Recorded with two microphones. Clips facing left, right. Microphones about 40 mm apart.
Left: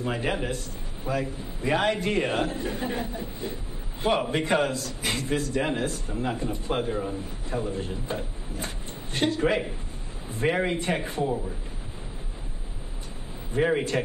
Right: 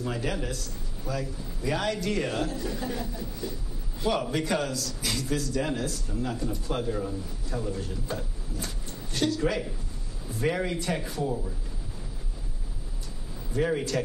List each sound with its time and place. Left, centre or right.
0.0 s a man's voice: left
13.5 s a man's voice: left